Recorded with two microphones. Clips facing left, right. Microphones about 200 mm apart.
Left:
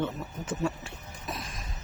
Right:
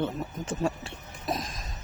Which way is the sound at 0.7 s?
30° right (ahead or behind).